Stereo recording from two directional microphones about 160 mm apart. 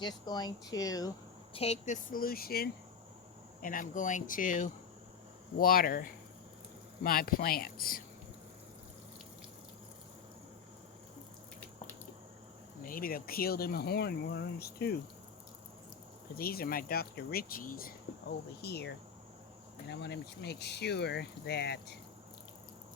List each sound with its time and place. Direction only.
0.0 s speech: 25° left (ahead or behind)
1.5 s speech: 40° left (ahead or behind); by 2.6 s 70° left (ahead or behind)
3.6 s speech: 55° left (ahead or behind)
12.8 s speech: 65° left (ahead or behind)
16.3 s speech: 70° left (ahead or behind); by 18.9 s 90° left
19.9 s speech: 90° left